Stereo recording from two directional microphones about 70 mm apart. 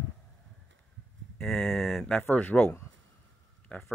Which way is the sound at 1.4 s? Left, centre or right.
Centre.